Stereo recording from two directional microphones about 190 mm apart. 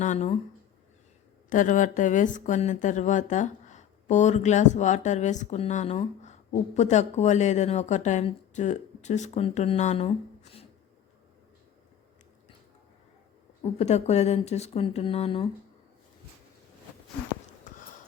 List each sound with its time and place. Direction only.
0.0 s speech: 40° left (ahead or behind)
1.5 s speech: 40° left (ahead or behind)
13.6 s speech: 35° left (ahead or behind)